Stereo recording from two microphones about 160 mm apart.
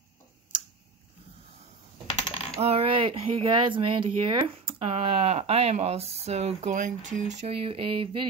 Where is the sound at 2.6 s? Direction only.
35° right (ahead or behind).